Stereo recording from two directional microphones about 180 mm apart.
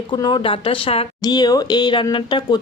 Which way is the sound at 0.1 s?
25° left (ahead or behind).